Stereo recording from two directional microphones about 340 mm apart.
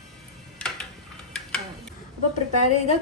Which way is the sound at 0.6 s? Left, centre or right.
Centre.